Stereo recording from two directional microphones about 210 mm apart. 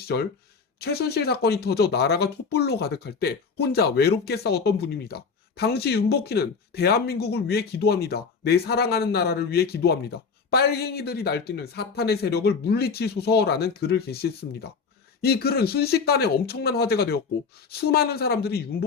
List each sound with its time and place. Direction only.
0.0 s speech: 50° left (ahead or behind)